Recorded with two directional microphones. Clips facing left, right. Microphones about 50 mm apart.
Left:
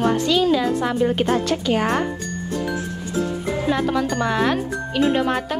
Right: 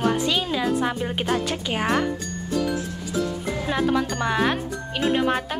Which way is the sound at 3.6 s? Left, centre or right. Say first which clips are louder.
Left 1 dB; centre.